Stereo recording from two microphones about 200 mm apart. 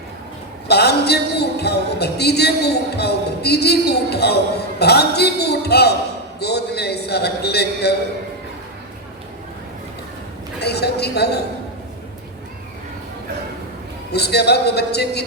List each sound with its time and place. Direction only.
0.7 s music: 55° left (ahead or behind)
10.6 s music: 55° left (ahead or behind)
14.1 s music: 55° left (ahead or behind)